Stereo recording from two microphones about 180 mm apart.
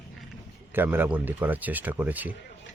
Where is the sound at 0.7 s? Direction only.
10° right (ahead or behind).